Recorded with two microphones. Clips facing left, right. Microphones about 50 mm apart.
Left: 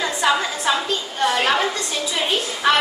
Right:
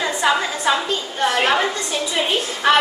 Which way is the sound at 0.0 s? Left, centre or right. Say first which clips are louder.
Right 1 dB; centre.